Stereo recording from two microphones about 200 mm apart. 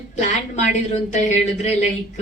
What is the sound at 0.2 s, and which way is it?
A woman's voice, 35° left (ahead or behind).